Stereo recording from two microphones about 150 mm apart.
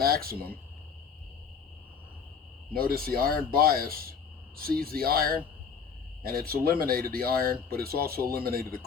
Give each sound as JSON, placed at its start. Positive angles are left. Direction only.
{"t": 0.0, "sound": "speech", "side_deg": -85}
{"t": 2.7, "sound": "speech", "side_deg": -90}